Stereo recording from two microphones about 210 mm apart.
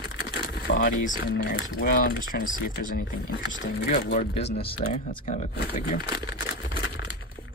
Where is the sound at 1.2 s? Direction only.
50° left (ahead or behind).